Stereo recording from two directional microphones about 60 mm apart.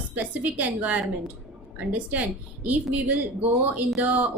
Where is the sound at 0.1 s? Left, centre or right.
Right.